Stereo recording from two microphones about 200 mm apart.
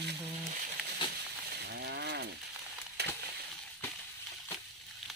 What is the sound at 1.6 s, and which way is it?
Cattle, 55° right (ahead or behind).